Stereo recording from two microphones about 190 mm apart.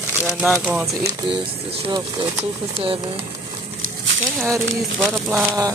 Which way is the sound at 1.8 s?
25° right (ahead or behind).